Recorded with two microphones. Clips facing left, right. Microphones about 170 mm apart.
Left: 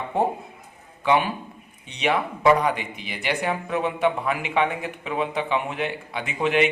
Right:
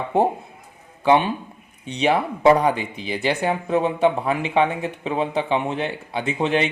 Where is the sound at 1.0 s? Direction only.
30° right (ahead or behind).